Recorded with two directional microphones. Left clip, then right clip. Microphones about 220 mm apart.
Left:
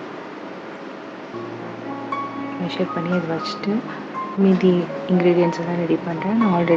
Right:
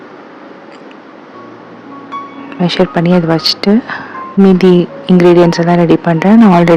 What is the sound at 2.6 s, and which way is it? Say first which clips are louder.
Speech: right 14 dB; 50° right (ahead or behind).